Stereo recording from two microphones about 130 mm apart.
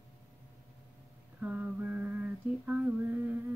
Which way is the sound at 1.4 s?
10° right (ahead or behind).